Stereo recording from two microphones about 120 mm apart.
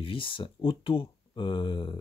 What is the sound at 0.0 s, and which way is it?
Speech, 45° left (ahead or behind).